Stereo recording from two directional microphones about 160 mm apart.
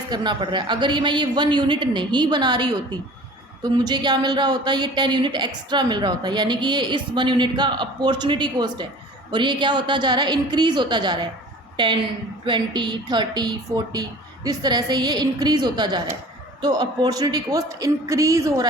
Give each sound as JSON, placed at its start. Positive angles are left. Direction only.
{"t": 0.1, "sound": "speech", "side_deg": -25}
{"t": 12.5, "sound": "speech", "side_deg": -30}